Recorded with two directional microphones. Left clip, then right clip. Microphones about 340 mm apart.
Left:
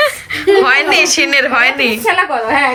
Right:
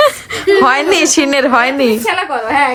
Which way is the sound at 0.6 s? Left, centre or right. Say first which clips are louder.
Even; centre.